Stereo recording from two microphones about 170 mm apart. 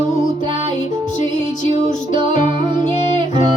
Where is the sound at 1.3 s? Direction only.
45° left (ahead or behind).